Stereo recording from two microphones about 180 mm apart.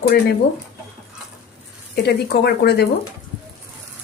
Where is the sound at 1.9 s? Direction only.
65° left (ahead or behind).